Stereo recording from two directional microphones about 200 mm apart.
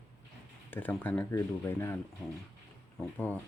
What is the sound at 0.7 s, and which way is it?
Speech, 10° left (ahead or behind).